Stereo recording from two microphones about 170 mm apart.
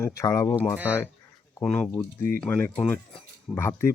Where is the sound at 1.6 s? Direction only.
5° left (ahead or behind).